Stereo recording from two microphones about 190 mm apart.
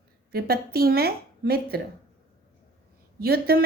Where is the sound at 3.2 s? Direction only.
55° right (ahead or behind).